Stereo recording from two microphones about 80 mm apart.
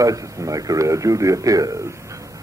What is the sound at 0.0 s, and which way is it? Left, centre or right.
A man's voice, right.